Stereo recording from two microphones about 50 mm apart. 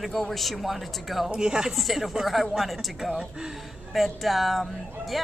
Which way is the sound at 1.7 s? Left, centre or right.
Centre.